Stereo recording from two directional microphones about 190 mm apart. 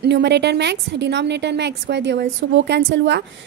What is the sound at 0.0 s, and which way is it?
A woman's voice, 60° right (ahead or behind).